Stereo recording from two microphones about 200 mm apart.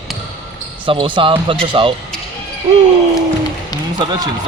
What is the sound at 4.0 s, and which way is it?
Speech, 20° right (ahead or behind).